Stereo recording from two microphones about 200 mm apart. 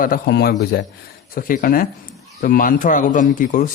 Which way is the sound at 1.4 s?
45° left (ahead or behind).